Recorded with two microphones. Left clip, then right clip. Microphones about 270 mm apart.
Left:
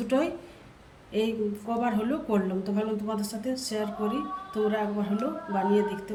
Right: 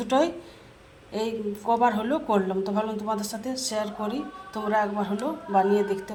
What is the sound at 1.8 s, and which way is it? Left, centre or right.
Speech, centre.